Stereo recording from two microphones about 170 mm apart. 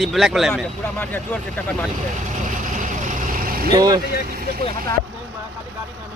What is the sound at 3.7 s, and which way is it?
Speech, 25° right (ahead or behind).